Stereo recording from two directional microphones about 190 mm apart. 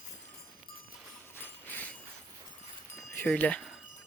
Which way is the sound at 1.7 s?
10° left (ahead or behind).